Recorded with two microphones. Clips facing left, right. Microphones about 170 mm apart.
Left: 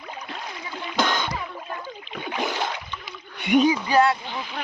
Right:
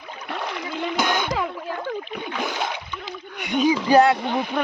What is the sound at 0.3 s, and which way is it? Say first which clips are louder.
Splash: right 11 dB; 70° right (ahead or behind).